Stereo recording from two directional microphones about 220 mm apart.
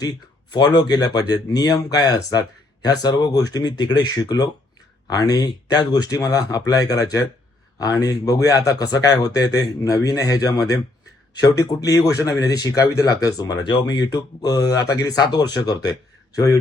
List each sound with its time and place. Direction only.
0.0 s speech: 20° left (ahead or behind)